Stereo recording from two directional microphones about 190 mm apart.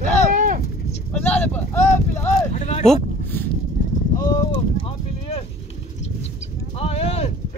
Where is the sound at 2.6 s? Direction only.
35° left (ahead or behind).